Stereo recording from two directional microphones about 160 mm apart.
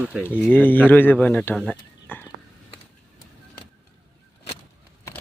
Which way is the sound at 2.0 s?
10° left (ahead or behind).